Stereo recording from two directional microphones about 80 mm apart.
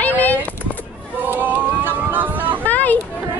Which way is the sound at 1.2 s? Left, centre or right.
Right.